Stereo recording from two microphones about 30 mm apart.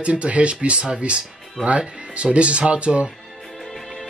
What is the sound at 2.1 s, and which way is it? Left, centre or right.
Speech, right.